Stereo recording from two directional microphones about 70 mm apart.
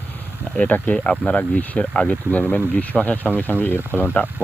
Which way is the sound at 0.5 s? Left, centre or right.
Centre.